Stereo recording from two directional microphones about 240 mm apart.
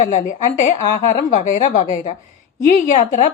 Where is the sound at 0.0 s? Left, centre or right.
Left.